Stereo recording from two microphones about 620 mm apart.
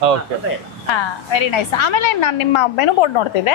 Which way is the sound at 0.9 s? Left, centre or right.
Left.